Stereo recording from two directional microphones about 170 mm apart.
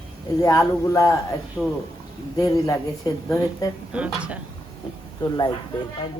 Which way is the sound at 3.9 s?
5° right (ahead or behind).